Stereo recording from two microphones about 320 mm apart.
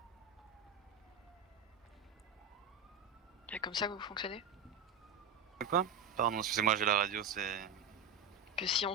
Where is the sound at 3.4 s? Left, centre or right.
Centre.